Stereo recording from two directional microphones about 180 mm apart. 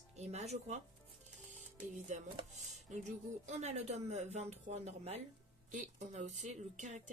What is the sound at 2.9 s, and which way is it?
Speech, 40° right (ahead or behind).